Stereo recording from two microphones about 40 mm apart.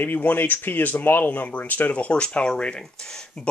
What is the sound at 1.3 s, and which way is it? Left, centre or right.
Speech, left.